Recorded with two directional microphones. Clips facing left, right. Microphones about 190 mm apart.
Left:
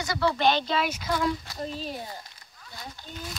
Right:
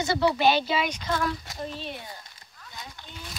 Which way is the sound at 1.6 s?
35° left (ahead or behind).